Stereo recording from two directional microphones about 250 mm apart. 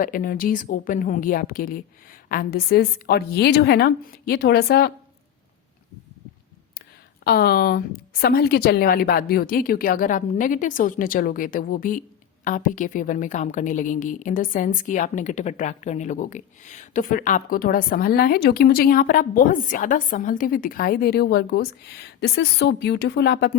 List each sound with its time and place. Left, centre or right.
0.0 s a woman's voice: left
7.3 s a woman's voice: left